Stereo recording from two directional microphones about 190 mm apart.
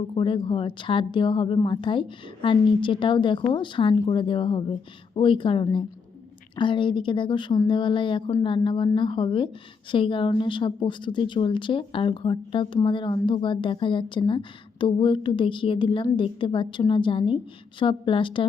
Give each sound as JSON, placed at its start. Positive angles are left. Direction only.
{"t": 0.1, "sound": "a woman's voice", "side_deg": 25}